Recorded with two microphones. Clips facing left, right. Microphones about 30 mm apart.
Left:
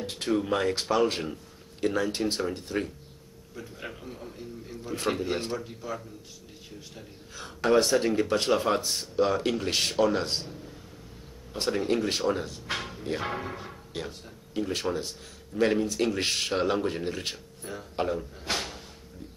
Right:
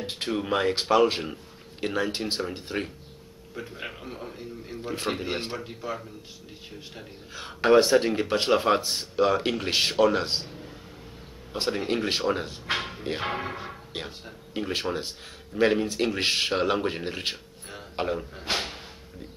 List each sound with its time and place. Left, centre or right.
0.0 s a man's voice: right